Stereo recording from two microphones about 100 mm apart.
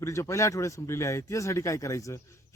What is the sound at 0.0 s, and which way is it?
Speech, 30° left (ahead or behind).